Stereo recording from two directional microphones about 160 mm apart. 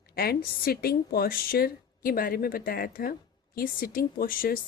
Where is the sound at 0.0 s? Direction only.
70° left (ahead or behind).